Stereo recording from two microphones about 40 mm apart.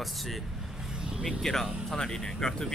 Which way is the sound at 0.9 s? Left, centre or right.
Centre.